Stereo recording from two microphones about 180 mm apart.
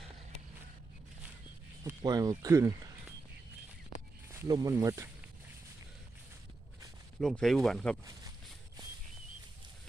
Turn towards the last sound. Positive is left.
turn(degrees=5)  # may be behind; listen again after turning